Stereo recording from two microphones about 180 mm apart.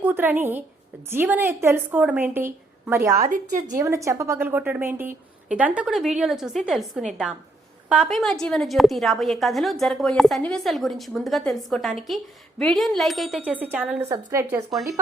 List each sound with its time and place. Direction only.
0.0 s a woman's voice: 10° right (ahead or behind)
3.2 s a woman's voice: 50° right (ahead or behind)
3.8 s a woman's voice: 15° right (ahead or behind)